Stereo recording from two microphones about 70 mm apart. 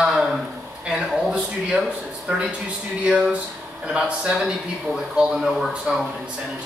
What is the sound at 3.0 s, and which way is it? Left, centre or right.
A man's voice, centre.